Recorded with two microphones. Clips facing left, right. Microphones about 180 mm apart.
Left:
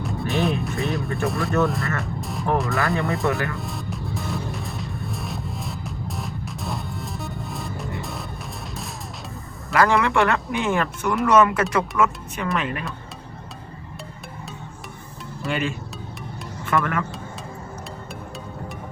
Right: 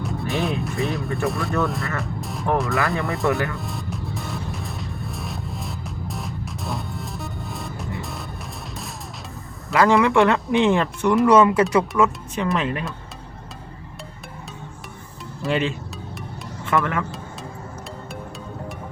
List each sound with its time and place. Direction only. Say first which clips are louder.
0.0 s speech: left 1 dB; centre (ahead or behind)
3.5 s music: even; centre (ahead or behind)
9.7 s speech: right 3 dB; 20° right (ahead or behind)
11.8 s speech: right 2 dB; 20° right (ahead or behind)
12.5 s speech: even; 30° right (ahead or behind)
15.4 s speech: right 3 dB; 25° right (ahead or behind)
16.7 s speech: right 1 dB; 15° right (ahead or behind)